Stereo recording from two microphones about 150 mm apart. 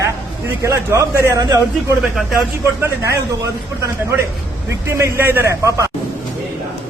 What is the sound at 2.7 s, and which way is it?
Speech, 20° right (ahead or behind).